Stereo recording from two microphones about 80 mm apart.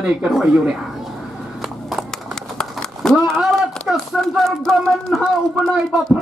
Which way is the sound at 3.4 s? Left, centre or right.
Centre.